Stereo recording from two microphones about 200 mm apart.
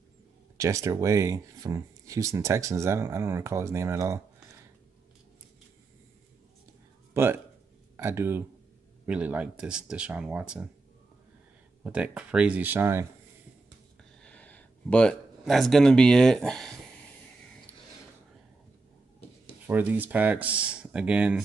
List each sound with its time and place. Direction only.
0.6 s speech: 15° right (ahead or behind)
7.2 s speech: 10° right (ahead or behind)
11.8 s speech: 5° right (ahead or behind)
14.2 s speech: 5° left (ahead or behind)
19.6 s speech: 10° right (ahead or behind)